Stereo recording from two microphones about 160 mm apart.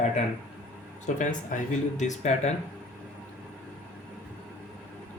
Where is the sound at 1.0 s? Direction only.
50° left (ahead or behind).